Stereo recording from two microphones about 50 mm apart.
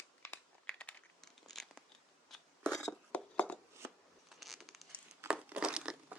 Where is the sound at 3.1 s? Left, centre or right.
Left.